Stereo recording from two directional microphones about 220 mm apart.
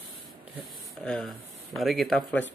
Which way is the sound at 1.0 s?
Centre (ahead or behind).